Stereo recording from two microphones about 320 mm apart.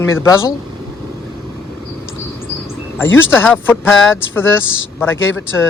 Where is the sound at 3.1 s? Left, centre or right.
Left.